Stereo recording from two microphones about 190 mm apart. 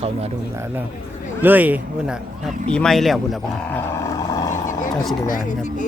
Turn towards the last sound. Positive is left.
turn(degrees=40)  # may be behind; listen again after turning